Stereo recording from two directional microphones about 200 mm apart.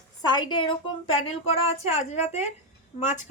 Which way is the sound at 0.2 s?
20° left (ahead or behind).